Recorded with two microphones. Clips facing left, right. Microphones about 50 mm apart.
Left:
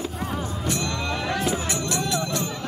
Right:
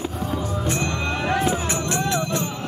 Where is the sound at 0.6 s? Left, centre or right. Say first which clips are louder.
Even; right.